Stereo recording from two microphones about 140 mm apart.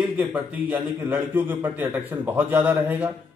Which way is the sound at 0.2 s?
10° right (ahead or behind).